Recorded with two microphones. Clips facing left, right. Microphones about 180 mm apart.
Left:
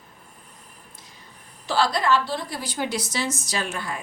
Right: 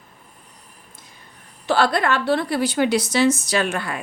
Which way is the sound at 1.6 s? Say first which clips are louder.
Right 4 dB; 60° right (ahead or behind).